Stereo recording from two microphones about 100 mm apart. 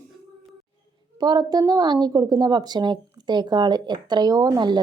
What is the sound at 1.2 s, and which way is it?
A woman's voice, 45° right (ahead or behind).